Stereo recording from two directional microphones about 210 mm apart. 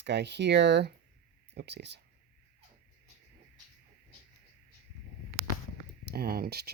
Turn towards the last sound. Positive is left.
turn(degrees=-50)  # may be behind; listen again after turning